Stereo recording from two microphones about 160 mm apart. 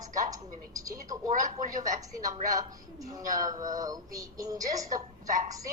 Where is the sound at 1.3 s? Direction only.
50° right (ahead or behind).